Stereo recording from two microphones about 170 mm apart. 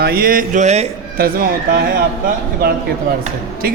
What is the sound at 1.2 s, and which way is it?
Speech, 60° right (ahead or behind).